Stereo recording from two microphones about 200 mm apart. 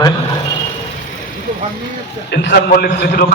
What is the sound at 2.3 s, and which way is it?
Speech, 55° left (ahead or behind).